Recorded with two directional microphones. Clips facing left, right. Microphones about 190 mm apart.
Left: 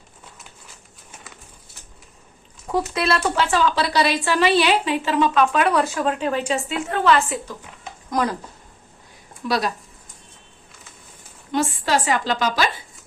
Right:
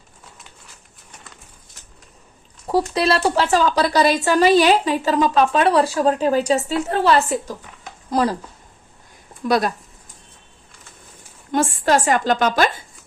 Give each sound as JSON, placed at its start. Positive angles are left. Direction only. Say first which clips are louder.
{"t": 2.9, "sound": "speech", "louder": "right 3 dB", "side_deg": -35}
{"t": 9.5, "sound": "speech", "louder": "right 4 dB", "side_deg": -50}
{"t": 11.5, "sound": "a woman's voice", "louder": "right 3 dB", "side_deg": -50}